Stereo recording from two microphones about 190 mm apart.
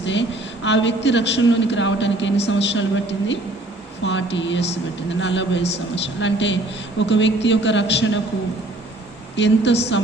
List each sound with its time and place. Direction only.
0.0 s a man's voice: 75° left (ahead or behind)
9.3 s a man's voice: 65° left (ahead or behind)